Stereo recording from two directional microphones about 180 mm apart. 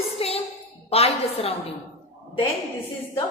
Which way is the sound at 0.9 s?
35° left (ahead or behind).